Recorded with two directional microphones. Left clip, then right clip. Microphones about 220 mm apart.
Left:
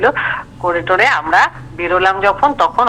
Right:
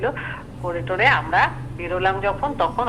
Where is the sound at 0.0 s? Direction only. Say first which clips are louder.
Left 12 dB; 45° left (ahead or behind).